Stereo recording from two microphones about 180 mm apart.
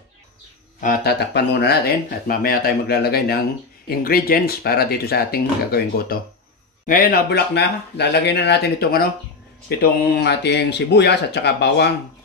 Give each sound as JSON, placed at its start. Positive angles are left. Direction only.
{"t": 0.7, "sound": "speech", "side_deg": 50}
{"t": 1.2, "sound": "speech", "side_deg": 65}